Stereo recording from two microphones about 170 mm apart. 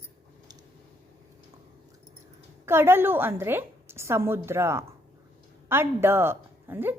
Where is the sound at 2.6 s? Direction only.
15° right (ahead or behind).